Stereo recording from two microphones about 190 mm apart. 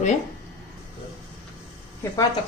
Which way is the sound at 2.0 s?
10° left (ahead or behind).